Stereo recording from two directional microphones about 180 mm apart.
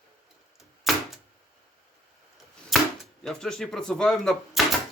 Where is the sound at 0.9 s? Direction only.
Centre (ahead or behind).